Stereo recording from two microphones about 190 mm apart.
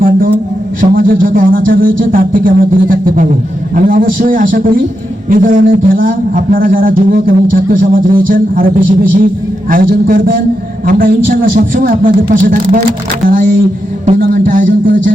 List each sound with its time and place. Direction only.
0.8 s a man's voice: 45° right (ahead or behind)